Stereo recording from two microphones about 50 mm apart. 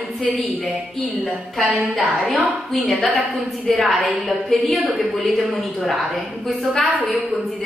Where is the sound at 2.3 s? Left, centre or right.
Right.